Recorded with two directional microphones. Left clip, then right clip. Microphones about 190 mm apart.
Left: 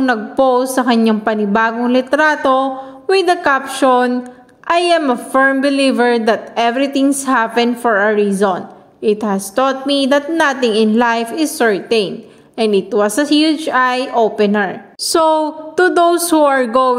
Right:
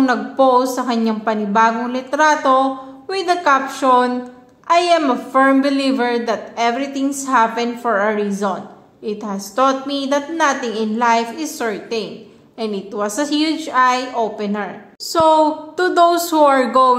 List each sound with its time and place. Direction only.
0.0 s a woman's voice: 35° left (ahead or behind)